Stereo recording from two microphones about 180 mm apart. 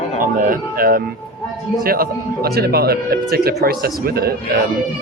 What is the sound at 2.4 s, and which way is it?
Speech, 60° right (ahead or behind).